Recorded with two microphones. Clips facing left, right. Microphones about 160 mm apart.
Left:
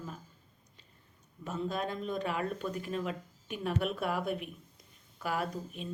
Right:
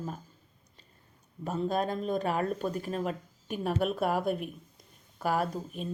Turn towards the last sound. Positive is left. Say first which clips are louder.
# right 4 dB
turn(degrees=-40)  # may be behind; listen again after turning